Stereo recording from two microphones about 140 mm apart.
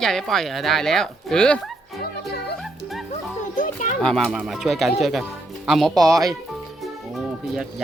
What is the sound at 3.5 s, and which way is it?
Children playing, 70° left (ahead or behind).